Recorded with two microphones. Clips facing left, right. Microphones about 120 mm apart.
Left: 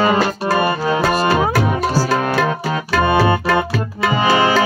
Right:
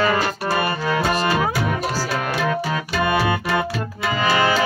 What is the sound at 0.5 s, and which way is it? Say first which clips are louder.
Music: left 5 dB; 25° left (ahead or behind).